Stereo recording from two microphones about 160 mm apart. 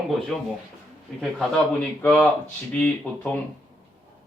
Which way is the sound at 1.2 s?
5° left (ahead or behind).